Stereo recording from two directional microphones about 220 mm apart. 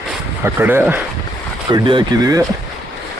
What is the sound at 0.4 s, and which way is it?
Speech, 10° right (ahead or behind).